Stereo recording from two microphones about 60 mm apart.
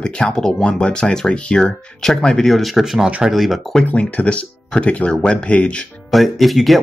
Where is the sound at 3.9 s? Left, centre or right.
Left.